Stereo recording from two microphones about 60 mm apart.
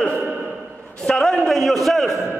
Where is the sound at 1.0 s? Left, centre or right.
Centre.